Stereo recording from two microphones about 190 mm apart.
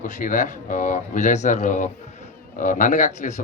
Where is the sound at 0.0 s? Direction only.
40° left (ahead or behind).